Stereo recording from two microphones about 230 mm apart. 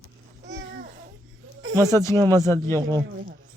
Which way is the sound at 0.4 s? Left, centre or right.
Right.